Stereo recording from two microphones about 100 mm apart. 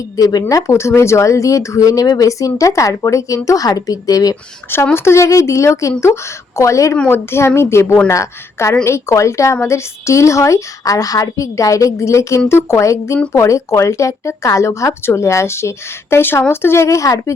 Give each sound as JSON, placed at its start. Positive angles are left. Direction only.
{"t": 0.2, "sound": "a woman's voice", "side_deg": 40}